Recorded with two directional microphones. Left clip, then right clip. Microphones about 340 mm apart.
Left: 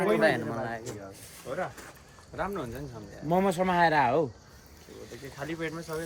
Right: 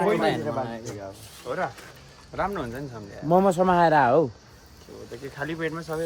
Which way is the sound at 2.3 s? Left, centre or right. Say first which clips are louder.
Right 5 dB; right.